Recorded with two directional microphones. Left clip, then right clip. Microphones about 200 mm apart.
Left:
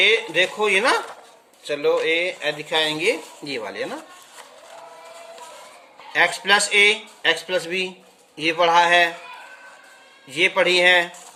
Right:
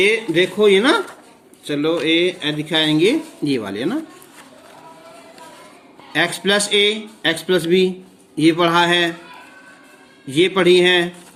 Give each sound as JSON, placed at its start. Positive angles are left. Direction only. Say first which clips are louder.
{"t": 0.0, "sound": "speech", "louder": "right 1 dB", "side_deg": -10}
{"t": 6.1, "sound": "speech", "louder": "even", "side_deg": -15}
{"t": 10.2, "sound": "speech", "louder": "right 4 dB", "side_deg": -20}